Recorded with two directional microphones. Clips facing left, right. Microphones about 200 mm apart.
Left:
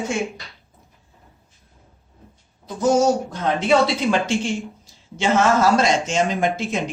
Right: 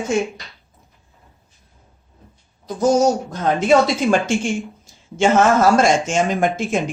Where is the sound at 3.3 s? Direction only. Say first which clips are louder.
Right 3 dB; 45° right (ahead or behind).